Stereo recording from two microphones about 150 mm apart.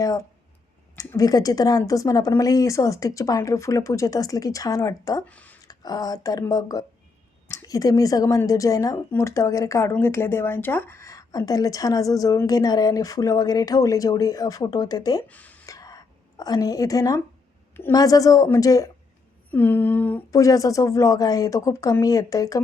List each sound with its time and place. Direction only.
0.0 s a sound: 25° left (ahead or behind)
0.9 s a woman's voice: 25° left (ahead or behind)
5.2 s speech: 10° left (ahead or behind)
5.6 s a woman's voice: 25° left (ahead or behind)
15.3 s a sound: 10° left (ahead or behind)
15.6 s whispering: 25° left (ahead or behind)
17.9 s a woman's voice: 25° left (ahead or behind)
19.5 s a sound: 15° left (ahead or behind)
20.3 s a woman's voice: 20° left (ahead or behind)